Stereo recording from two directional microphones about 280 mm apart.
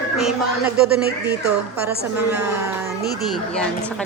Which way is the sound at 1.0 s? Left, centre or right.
Right.